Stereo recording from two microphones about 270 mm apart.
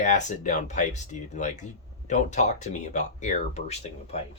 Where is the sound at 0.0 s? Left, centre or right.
Left.